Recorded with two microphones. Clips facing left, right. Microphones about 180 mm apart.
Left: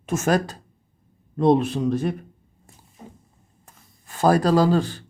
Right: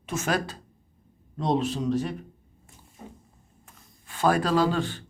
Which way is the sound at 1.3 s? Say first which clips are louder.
Left 7 dB; 55° left (ahead or behind).